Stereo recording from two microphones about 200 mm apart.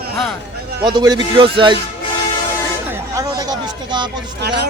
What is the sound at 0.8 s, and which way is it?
Speech, 20° right (ahead or behind).